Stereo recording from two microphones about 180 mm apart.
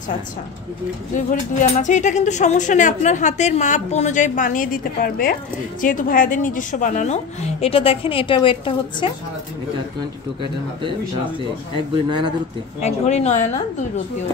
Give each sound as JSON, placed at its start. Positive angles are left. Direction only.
{"t": 1.1, "sound": "speech", "side_deg": 45}
{"t": 7.6, "sound": "a woman's voice", "side_deg": 30}
{"t": 12.8, "sound": "a woman's voice", "side_deg": 40}